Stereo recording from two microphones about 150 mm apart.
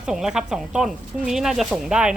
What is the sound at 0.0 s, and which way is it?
Speech, 5° right (ahead or behind).